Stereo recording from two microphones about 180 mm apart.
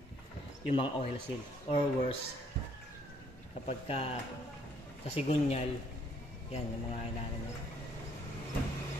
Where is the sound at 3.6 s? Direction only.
35° left (ahead or behind).